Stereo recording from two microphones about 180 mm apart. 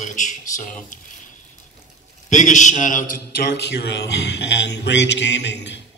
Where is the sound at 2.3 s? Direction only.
45° left (ahead or behind).